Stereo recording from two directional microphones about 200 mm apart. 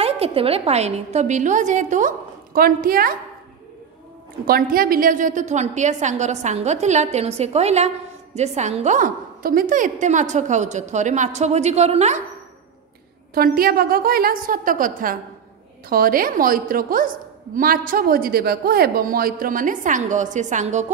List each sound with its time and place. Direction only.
0.0 s a woman's voice: 30° right (ahead or behind); by 3.2 s 45° right (ahead or behind)
4.5 s a woman's voice: 45° right (ahead or behind)
13.3 s a man's voice: 50° right (ahead or behind)